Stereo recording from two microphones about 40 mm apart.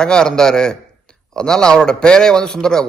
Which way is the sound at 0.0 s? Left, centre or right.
Centre.